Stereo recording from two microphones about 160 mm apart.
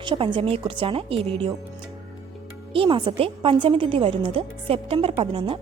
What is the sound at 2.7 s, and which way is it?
A woman's voice, 30° right (ahead or behind).